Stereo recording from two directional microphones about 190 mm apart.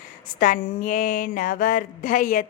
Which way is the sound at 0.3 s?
45° left (ahead or behind).